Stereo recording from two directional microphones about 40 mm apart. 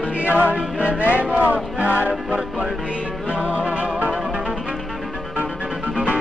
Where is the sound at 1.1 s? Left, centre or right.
Right.